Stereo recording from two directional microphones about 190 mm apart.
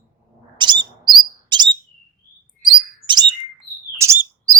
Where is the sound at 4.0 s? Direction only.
15° right (ahead or behind).